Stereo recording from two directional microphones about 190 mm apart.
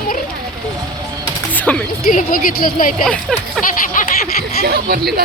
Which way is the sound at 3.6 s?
5° left (ahead or behind).